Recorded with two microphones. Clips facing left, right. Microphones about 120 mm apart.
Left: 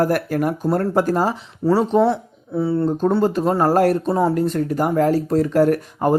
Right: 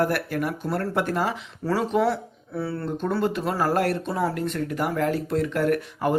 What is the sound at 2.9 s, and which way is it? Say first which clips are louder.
Speech: left 7 dB; 35° left (ahead or behind).